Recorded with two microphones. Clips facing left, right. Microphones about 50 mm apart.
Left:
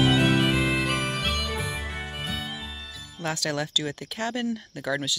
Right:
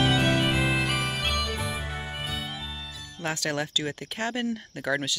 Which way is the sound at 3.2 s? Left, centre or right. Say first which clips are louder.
Left 1 dB; right.